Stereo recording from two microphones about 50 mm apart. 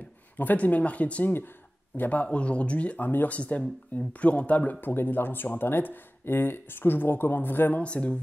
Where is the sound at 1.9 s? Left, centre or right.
Left.